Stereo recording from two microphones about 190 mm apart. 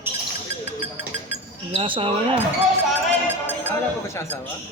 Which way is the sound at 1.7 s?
30° right (ahead or behind).